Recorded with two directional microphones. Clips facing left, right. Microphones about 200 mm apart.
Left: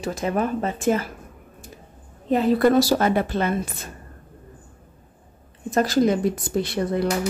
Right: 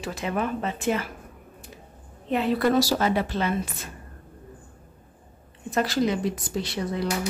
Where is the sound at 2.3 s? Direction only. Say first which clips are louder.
Left 5 dB; 40° left (ahead or behind).